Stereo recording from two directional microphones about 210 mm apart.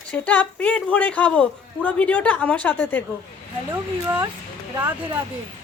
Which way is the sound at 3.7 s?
15° right (ahead or behind).